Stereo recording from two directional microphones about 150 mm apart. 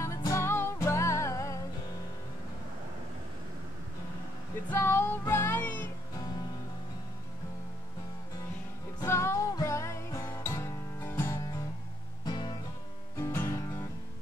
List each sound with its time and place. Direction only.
0.0 s music: 20° left (ahead or behind)
4.6 s music: 15° left (ahead or behind)
9.0 s music: 20° left (ahead or behind)
12.3 s music: 30° left (ahead or behind)
13.2 s music: 15° left (ahead or behind)